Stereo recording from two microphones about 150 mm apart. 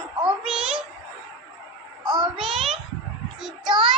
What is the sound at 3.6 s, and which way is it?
Speech, 30° right (ahead or behind).